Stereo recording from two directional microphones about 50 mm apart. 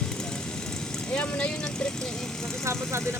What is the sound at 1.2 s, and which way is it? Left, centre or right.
Speech, left.